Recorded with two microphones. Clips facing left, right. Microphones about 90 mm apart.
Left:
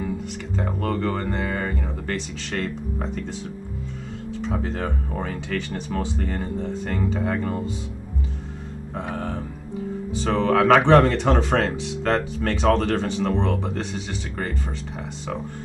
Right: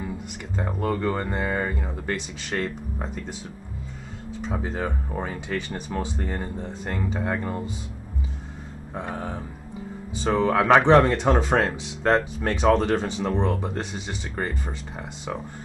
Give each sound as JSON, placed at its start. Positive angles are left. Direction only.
{"t": 0.6, "sound": "speech", "side_deg": -10}
{"t": 9.1, "sound": "speech", "side_deg": -10}